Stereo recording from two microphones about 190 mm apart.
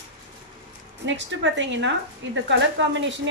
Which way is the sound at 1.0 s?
75° right (ahead or behind).